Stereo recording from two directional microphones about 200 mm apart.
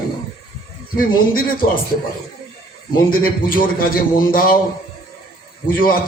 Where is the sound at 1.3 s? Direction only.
45° left (ahead or behind).